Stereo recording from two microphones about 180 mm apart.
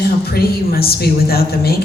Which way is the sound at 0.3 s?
60° left (ahead or behind).